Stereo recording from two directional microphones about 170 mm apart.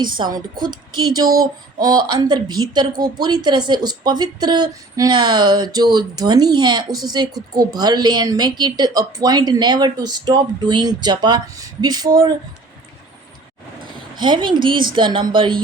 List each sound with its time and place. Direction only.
0.2 s a woman's voice: 30° right (ahead or behind)
14.2 s speech: 25° right (ahead or behind)